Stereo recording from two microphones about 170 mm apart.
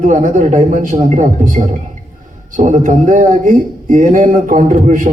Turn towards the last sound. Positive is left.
turn(degrees=-50)  # may be behind; listen again after turning